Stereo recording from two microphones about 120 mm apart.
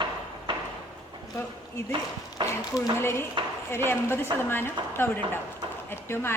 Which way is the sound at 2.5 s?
20° left (ahead or behind).